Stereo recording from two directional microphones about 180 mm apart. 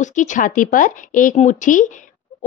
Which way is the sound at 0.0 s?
45° left (ahead or behind).